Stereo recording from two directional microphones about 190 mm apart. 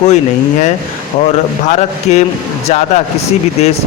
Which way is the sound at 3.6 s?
35° left (ahead or behind).